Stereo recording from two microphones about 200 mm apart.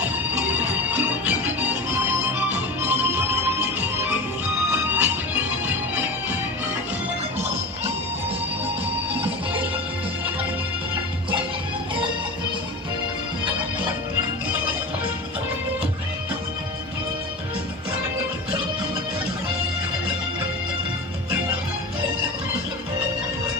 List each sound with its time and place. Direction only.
0.0 s music: 10° right (ahead or behind)